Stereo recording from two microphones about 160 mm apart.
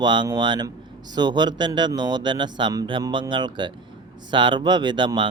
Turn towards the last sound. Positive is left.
turn(degrees=-30)  # may be behind; listen again after turning